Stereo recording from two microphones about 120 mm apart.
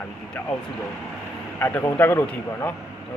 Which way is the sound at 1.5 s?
15° left (ahead or behind).